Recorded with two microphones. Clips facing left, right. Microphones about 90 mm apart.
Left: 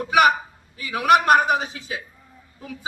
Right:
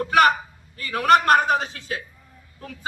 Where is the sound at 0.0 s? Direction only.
10° left (ahead or behind).